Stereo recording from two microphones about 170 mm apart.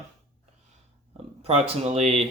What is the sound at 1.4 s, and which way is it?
Speech, 40° right (ahead or behind).